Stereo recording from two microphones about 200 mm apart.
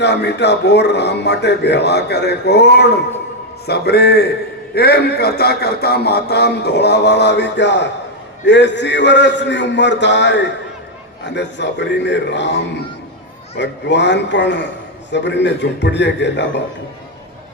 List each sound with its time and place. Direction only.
0.0 s a man's voice: 60° left (ahead or behind)
13.6 s a man's voice: 60° left (ahead or behind)